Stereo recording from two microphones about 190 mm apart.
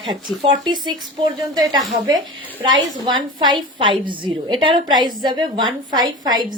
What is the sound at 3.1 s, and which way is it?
A woman's voice, 25° right (ahead or behind).